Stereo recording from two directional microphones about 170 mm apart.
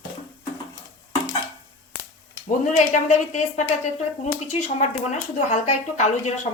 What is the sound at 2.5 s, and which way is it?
A woman's voice, 45° left (ahead or behind).